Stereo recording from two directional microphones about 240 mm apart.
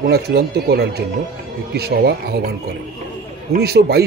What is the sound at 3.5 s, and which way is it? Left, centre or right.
Speech, right.